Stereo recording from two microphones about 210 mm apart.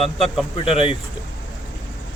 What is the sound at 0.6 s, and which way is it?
Speech, 25° left (ahead or behind).